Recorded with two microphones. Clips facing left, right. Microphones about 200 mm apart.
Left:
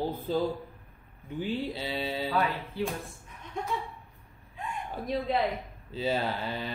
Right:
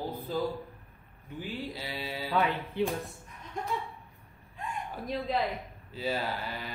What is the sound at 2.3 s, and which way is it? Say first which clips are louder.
Speech: right 5 dB; 15° right (ahead or behind).